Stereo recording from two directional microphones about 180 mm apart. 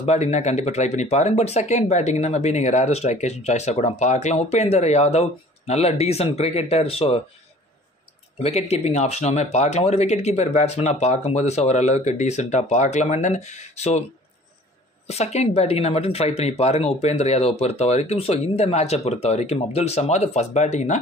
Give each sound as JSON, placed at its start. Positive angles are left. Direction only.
{"t": 0.0, "sound": "speech", "side_deg": 35}
{"t": 8.4, "sound": "speech", "side_deg": 35}
{"t": 15.0, "sound": "speech", "side_deg": 35}